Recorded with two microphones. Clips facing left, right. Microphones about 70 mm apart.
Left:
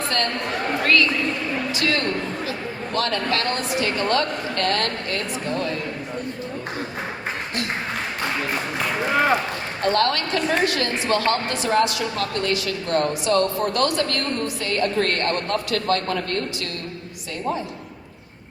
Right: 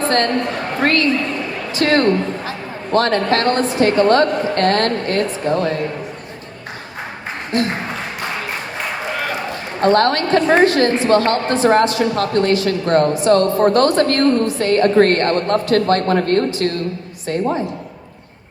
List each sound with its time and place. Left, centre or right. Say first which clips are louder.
0.8 s a sound: right 5 dB; right
2.9 s a woman's voice: right 9 dB; right
9.8 s a woman's voice: right 7 dB; right